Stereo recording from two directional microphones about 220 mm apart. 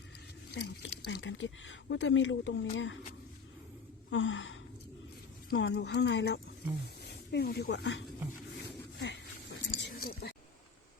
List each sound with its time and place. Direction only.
0.5 s speech: 50° left (ahead or behind)
4.1 s speech: 60° left (ahead or behind)
9.0 s a sound: 55° left (ahead or behind)